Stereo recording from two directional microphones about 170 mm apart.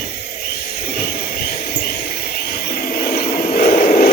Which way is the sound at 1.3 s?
60° left (ahead or behind).